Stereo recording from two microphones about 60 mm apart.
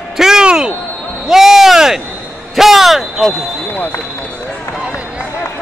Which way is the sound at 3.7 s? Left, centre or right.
Left.